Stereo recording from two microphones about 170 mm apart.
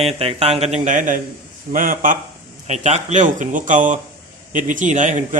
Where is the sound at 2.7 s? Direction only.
40° right (ahead or behind).